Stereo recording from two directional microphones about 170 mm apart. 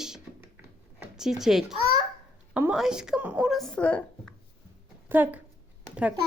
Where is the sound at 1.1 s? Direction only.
5° right (ahead or behind).